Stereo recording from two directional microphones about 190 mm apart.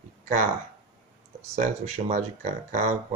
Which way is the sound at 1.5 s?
35° right (ahead or behind).